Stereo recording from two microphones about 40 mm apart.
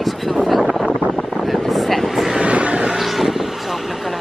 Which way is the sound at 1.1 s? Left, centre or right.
Centre.